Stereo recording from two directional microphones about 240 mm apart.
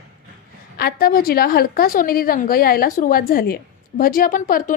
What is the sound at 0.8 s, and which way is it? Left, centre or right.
A woman's voice, left.